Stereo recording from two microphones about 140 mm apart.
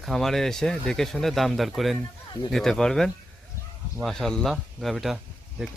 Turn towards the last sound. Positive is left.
turn(degrees=-5)  # may be behind; listen again after turning